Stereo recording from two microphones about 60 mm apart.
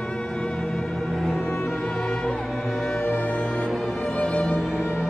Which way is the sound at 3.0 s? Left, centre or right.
Left.